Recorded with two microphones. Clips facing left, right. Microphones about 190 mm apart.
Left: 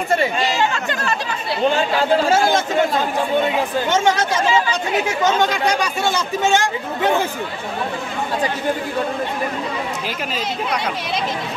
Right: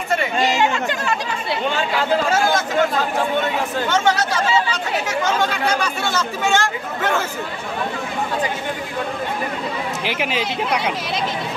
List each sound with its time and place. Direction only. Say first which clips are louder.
0.4 s chatter: right 2 dB; 15° right (ahead or behind)
2.2 s speech: left 2 dB; 30° left (ahead or behind)
3.4 s speech: left 2 dB; 15° left (ahead or behind)
5.2 s speech: left 3 dB; 15° left (ahead or behind)
10.0 s speech: right 3 dB; 80° right